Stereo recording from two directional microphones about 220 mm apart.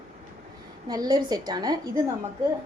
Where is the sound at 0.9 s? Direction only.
20° right (ahead or behind).